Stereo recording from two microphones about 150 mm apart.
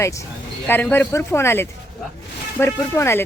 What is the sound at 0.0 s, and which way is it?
Speech, 20° left (ahead or behind).